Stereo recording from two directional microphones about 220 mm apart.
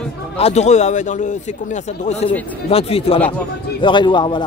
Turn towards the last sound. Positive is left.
turn(degrees=20)  # may be behind; listen again after turning